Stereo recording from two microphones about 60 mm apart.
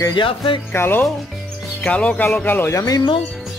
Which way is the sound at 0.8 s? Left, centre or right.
Left.